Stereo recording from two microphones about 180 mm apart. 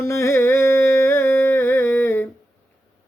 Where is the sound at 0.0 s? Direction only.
15° left (ahead or behind).